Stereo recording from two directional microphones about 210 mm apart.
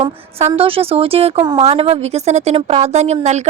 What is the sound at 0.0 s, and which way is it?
A woman's voice, 30° right (ahead or behind).